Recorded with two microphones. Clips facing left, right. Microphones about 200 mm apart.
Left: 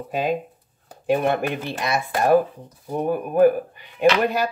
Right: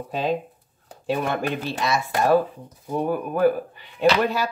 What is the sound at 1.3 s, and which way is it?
Speech, 15° left (ahead or behind).